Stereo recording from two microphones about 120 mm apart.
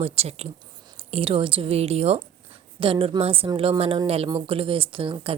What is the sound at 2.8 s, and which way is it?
A woman's voice, 50° right (ahead or behind).